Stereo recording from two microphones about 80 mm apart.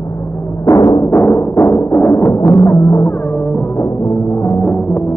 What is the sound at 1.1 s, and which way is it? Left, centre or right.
Music, left.